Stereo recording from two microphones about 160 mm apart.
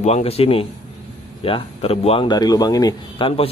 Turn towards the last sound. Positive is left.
turn(degrees=25)  # may be behind; listen again after turning